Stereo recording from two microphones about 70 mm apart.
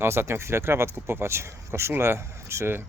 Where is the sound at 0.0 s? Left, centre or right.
Right.